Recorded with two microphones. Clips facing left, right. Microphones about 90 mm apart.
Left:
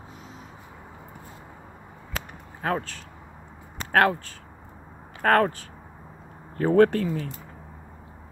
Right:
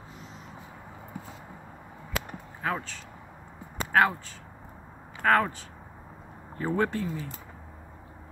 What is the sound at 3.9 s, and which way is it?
Speech, 60° left (ahead or behind).